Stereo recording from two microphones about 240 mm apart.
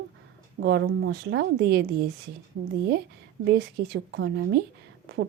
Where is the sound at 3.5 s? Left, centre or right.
Right.